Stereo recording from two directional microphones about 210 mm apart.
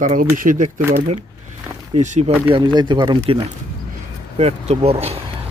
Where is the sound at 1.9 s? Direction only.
35° right (ahead or behind).